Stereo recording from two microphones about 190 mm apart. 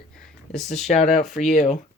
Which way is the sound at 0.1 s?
50° left (ahead or behind).